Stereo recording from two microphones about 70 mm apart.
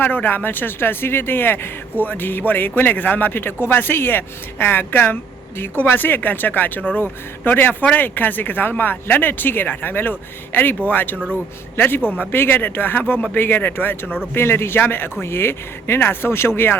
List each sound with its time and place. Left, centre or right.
0.0 s a man's voice: left